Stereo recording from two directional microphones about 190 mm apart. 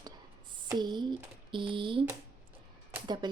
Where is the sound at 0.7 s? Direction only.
20° right (ahead or behind).